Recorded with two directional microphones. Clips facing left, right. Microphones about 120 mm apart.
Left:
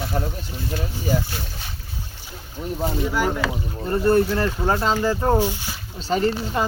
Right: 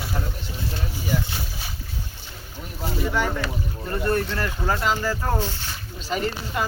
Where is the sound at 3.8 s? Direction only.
25° left (ahead or behind).